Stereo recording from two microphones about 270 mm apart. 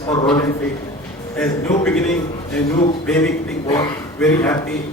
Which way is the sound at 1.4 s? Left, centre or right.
Centre.